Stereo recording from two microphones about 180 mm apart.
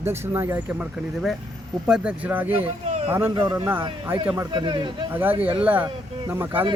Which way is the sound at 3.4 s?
25° right (ahead or behind).